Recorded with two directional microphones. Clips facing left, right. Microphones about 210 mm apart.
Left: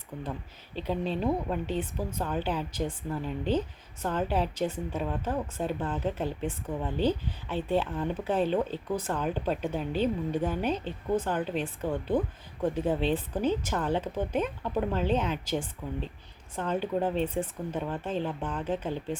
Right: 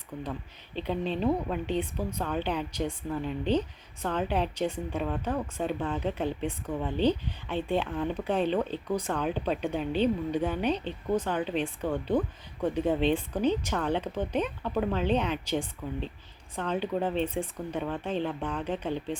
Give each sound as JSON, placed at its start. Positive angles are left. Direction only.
{"t": 1.1, "sound": "a woman's voice", "side_deg": 5}